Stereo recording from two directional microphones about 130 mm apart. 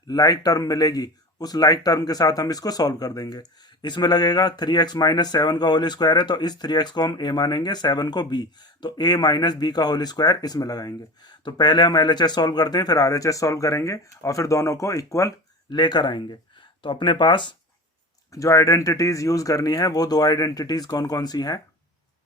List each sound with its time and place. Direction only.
0.1 s speech: 30° left (ahead or behind)
18.3 s speech: 25° left (ahead or behind)